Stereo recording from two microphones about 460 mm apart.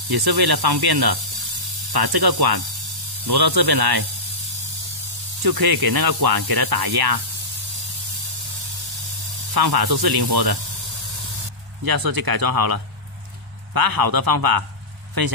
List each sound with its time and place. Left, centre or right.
0.1 s sanding: right
5.4 s sanding: right
9.5 s sanding: right
11.8 s sanding: right